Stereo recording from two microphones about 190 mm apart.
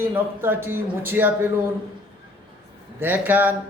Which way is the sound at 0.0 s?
10° right (ahead or behind).